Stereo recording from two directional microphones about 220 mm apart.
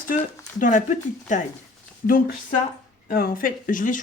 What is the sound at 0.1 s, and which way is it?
Speech, 40° left (ahead or behind).